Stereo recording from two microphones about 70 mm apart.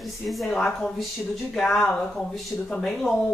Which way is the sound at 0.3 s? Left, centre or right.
Centre.